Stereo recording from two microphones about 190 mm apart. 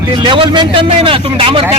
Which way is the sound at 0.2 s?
25° right (ahead or behind).